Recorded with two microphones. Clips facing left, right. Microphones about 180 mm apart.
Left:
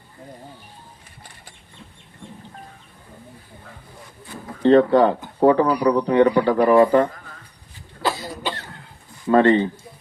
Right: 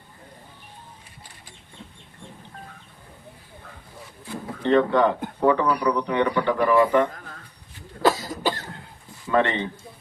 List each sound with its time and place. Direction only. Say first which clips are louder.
4.6 s a man's voice: left 5 dB; 35° left (ahead or behind)
8.0 s cough: right 4 dB; 45° right (ahead or behind)
9.3 s a man's voice: left 7 dB; 35° left (ahead or behind)